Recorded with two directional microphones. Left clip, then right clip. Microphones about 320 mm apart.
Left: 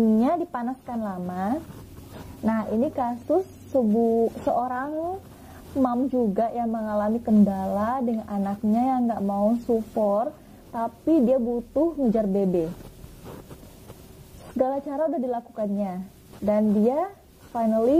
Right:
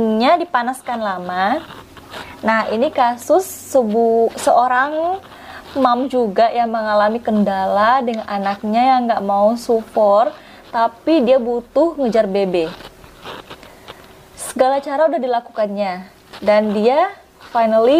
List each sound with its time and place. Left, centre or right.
0.2 s a woman's voice: centre
6.3 s a woman's voice: centre
9.2 s a woman's voice: centre
11.7 s a woman's voice: centre
13.2 s a sound: centre
14.5 s a woman's voice: centre